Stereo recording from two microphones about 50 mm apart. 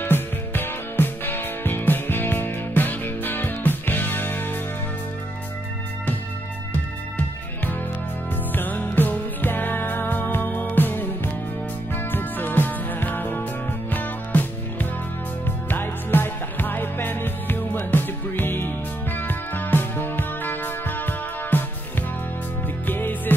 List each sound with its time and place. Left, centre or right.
0.0 s music: left
8.5 s music: left
22.8 s music: left